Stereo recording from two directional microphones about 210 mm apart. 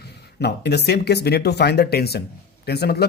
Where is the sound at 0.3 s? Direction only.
55° left (ahead or behind).